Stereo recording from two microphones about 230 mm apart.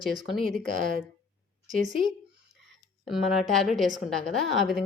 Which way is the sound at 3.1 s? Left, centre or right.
Centre.